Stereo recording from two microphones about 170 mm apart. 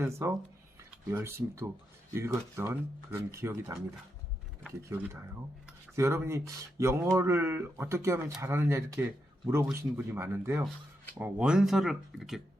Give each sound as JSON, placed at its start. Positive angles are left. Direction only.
{"t": 0.0, "sound": "speech", "side_deg": -15}
{"t": 6.0, "sound": "speech", "side_deg": -15}